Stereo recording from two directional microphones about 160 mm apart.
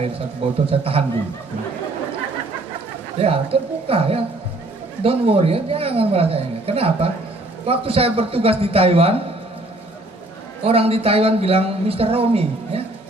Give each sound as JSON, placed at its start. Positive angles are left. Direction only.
{"t": 0.7, "sound": "speech", "side_deg": -35}
{"t": 3.2, "sound": "speech", "side_deg": -35}
{"t": 10.6, "sound": "speech", "side_deg": -35}